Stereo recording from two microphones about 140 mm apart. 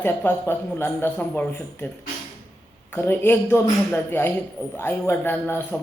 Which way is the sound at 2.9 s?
15° left (ahead or behind).